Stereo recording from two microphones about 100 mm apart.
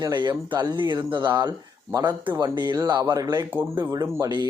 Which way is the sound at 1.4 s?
40° right (ahead or behind).